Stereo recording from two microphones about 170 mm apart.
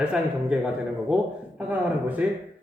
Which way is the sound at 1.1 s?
10° right (ahead or behind).